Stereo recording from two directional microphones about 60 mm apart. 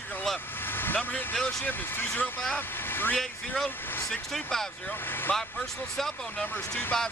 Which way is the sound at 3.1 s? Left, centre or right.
Centre.